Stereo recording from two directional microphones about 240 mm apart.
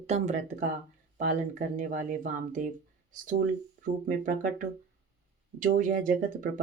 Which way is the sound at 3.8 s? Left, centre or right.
Right.